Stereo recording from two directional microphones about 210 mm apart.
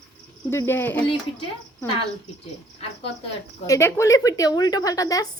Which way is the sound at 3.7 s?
15° left (ahead or behind).